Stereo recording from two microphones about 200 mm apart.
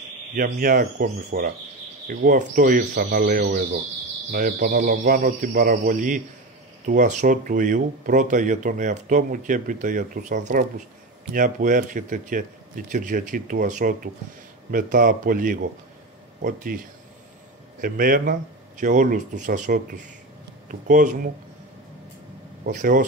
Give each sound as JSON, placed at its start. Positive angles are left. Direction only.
{"t": 0.4, "sound": "a man's voice", "side_deg": -45}
{"t": 22.7, "sound": "speech", "side_deg": -40}